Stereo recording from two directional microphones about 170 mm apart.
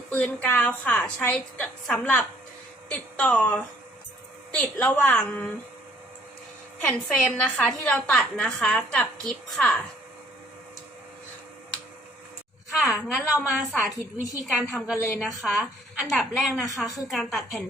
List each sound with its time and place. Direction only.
0.1 s a woman's voice: 10° left (ahead or behind)
6.8 s a woman's voice: 5° left (ahead or behind)
12.7 s a woman's voice: centre (ahead or behind)